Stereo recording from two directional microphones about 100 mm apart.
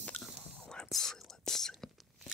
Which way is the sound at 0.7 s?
5° left (ahead or behind).